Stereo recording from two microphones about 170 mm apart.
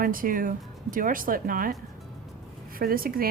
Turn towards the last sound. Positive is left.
turn(degrees=-60)  # may be behind; listen again after turning